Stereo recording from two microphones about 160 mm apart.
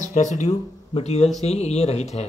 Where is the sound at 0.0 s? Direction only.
50° left (ahead or behind).